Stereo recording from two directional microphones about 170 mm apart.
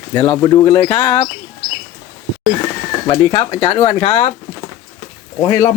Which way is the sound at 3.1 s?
25° left (ahead or behind).